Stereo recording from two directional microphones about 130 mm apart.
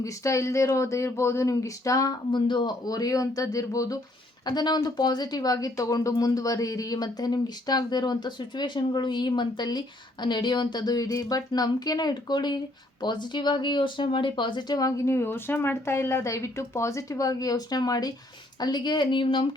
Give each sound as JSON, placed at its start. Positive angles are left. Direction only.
{"t": 0.0, "sound": "speech", "side_deg": 25}